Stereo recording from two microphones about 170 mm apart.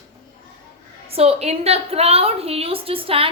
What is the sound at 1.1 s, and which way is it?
A woman's voice, 35° right (ahead or behind).